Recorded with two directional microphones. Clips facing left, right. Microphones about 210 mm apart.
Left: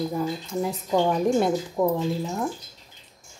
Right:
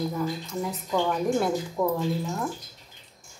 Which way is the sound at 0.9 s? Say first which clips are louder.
Left 3 dB; 20° left (ahead or behind).